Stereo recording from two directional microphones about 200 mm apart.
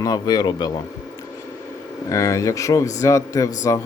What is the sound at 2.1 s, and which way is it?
Speech, 15° left (ahead or behind).